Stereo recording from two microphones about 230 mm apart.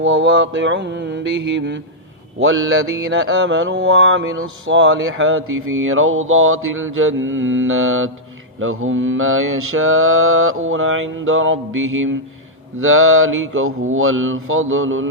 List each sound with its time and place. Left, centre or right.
0.0 s mantra: right